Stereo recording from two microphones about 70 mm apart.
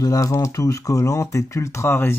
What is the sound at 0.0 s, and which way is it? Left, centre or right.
Speech, left.